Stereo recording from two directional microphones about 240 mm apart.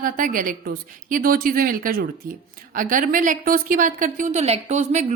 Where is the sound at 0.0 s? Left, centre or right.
Right.